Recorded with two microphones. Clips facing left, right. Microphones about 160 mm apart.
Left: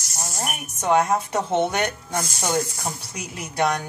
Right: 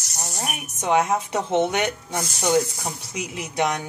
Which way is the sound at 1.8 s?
15° right (ahead or behind).